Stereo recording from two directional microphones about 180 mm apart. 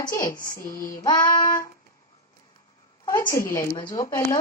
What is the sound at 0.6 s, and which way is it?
Child singing, 50° left (ahead or behind).